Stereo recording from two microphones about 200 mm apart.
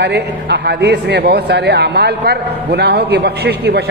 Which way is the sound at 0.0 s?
60° right (ahead or behind).